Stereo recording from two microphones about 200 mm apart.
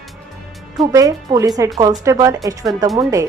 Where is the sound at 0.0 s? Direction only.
Centre (ahead or behind).